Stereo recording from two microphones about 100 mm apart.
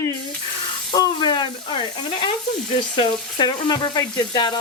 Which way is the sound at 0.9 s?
50° left (ahead or behind).